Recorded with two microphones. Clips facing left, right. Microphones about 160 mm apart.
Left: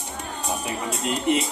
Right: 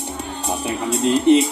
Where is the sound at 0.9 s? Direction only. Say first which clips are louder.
Right 10 dB; 30° right (ahead or behind).